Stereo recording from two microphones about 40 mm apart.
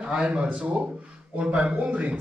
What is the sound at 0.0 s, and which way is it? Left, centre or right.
A man's voice, right.